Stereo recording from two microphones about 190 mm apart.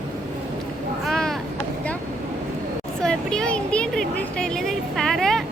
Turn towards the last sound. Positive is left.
turn(degrees=0)  # may be behind; listen again after turning